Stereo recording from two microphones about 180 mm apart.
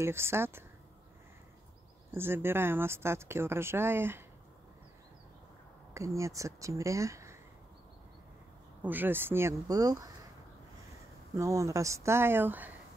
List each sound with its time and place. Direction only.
0.0 s speech: 15° right (ahead or behind)
2.1 s speech: 10° right (ahead or behind)
5.9 s speech: 15° right (ahead or behind)
8.8 s speech: 10° right (ahead or behind)
11.3 s speech: 20° right (ahead or behind)